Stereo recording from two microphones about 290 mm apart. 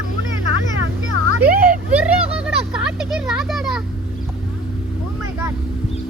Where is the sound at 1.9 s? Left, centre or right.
Centre.